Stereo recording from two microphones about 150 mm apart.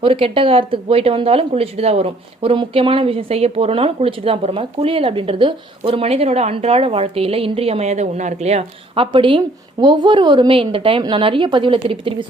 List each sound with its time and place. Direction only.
0.0 s speech: 35° right (ahead or behind)
9.1 s speech: 35° right (ahead or behind)